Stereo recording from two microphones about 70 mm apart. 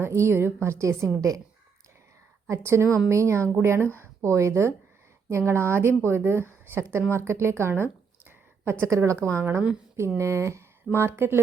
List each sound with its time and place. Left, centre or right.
0.0 s a woman's voice: right
2.5 s a woman's voice: right